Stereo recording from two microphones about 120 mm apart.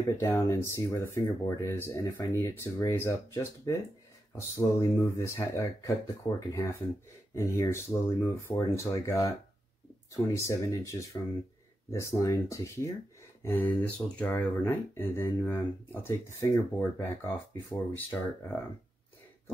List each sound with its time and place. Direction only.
0.2 s speech: 25° left (ahead or behind)
13.4 s speech: 15° left (ahead or behind)